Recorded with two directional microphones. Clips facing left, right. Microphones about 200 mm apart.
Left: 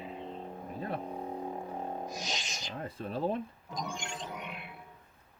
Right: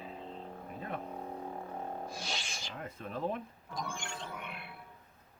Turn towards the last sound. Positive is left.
turn(degrees=20)  # may be behind; listen again after turning